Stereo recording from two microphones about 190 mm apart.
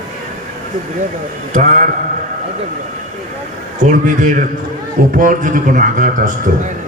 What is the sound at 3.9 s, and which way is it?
Speech, 40° right (ahead or behind).